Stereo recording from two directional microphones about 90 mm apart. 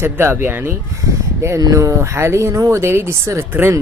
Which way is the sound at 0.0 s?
25° right (ahead or behind).